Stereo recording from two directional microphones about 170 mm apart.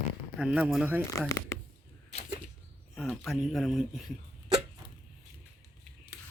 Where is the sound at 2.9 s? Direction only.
Centre (ahead or behind).